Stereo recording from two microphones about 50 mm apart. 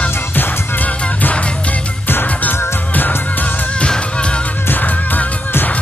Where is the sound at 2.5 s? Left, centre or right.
Left.